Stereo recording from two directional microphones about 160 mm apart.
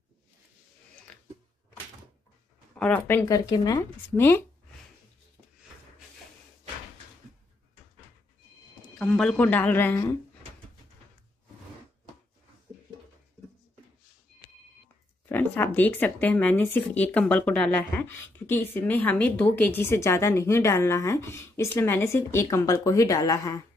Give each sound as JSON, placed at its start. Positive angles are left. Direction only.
{"t": 2.8, "sound": "speech", "side_deg": 10}
{"t": 3.3, "sound": "speech", "side_deg": 25}
{"t": 4.2, "sound": "speech", "side_deg": 15}
{"t": 8.9, "sound": "speech", "side_deg": 5}
{"t": 15.2, "sound": "speech", "side_deg": 15}